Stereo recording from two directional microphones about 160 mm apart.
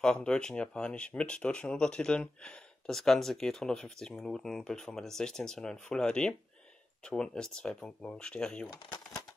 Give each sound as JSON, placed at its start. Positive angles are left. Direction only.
{"t": 0.0, "sound": "speech", "side_deg": 5}
{"t": 8.7, "sound": "speech", "side_deg": 25}